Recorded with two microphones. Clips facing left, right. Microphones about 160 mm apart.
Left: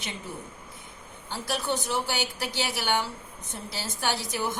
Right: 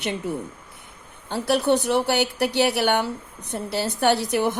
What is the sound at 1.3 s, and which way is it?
Speech, 65° right (ahead or behind).